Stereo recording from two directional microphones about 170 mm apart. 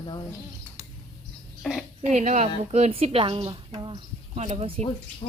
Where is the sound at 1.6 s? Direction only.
Centre (ahead or behind).